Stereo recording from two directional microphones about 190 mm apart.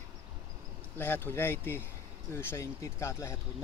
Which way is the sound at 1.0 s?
10° left (ahead or behind).